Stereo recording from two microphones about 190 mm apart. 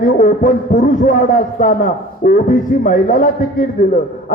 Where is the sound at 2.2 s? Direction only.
45° left (ahead or behind).